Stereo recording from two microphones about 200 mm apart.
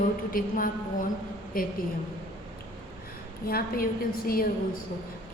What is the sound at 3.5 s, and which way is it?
Speech, 50° left (ahead or behind).